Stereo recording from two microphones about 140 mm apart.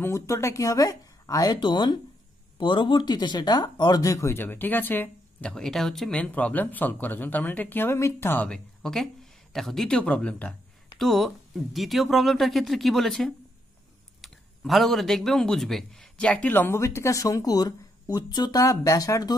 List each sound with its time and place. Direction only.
0.0 s speech: 20° left (ahead or behind)